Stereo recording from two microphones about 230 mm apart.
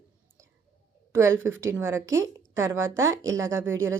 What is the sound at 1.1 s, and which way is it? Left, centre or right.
A woman's voice, centre.